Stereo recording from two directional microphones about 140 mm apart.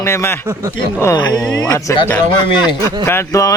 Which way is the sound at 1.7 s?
15° left (ahead or behind).